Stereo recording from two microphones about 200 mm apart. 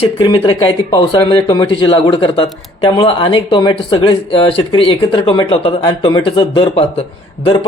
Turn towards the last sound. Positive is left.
turn(degrees=25)  # may be behind; listen again after turning